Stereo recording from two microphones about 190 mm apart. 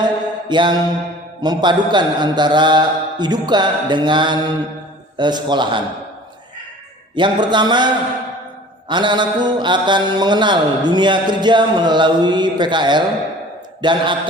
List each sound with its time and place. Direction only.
0.0 s mantra: 25° right (ahead or behind)
7.2 s mantra: 25° right (ahead or behind)